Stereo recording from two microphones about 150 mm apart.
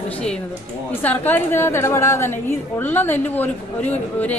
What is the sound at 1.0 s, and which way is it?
A woman's voice, 10° left (ahead or behind).